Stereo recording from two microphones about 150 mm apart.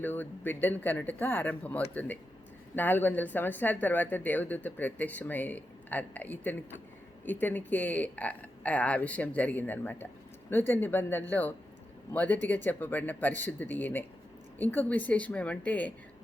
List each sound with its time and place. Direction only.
0.0 s speech: 10° left (ahead or behind)